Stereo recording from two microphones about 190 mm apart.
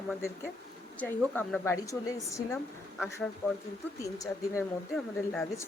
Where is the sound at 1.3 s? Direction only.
10° left (ahead or behind).